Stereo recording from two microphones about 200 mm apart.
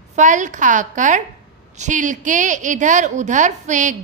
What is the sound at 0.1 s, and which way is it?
A woman's voice, 40° right (ahead or behind).